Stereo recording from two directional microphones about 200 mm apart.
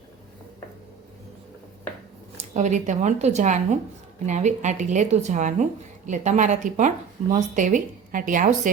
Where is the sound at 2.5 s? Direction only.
35° right (ahead or behind).